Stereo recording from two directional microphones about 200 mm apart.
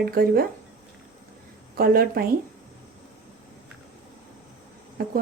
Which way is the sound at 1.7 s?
50° right (ahead or behind).